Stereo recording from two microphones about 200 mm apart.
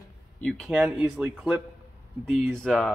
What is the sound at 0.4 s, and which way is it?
A man's voice, 5° left (ahead or behind).